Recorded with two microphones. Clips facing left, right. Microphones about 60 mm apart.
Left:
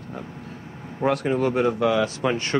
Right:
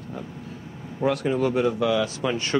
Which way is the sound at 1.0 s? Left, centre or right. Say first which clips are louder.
Left 1 dB; left.